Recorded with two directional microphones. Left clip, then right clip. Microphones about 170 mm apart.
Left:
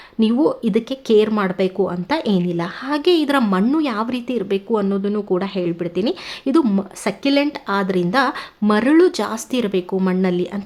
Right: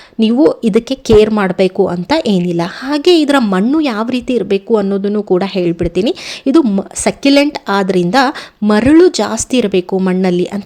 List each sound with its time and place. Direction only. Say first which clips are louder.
0.2 s a woman's voice: right 7 dB; 25° right (ahead or behind)